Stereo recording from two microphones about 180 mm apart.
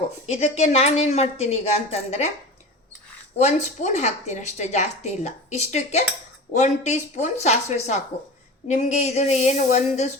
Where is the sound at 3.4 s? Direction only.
40° left (ahead or behind).